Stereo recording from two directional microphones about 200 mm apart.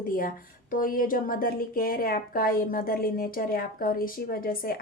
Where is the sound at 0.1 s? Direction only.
45° left (ahead or behind).